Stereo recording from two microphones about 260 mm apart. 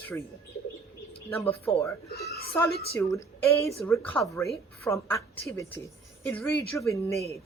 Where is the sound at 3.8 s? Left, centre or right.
Centre.